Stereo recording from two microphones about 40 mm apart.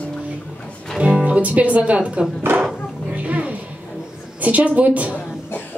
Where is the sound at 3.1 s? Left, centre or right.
Right.